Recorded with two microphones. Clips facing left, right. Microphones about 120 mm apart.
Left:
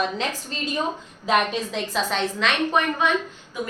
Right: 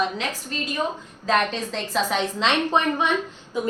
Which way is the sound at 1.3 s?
10° left (ahead or behind).